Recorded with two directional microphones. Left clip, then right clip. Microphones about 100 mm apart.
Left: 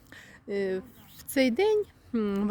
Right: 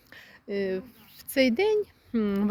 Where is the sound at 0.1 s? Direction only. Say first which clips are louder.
Even; 50° left (ahead or behind).